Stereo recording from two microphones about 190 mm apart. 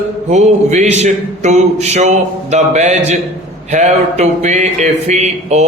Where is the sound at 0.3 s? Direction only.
40° right (ahead or behind).